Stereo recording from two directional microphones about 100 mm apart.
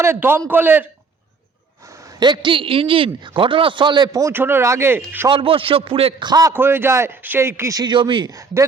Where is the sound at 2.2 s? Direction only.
50° right (ahead or behind).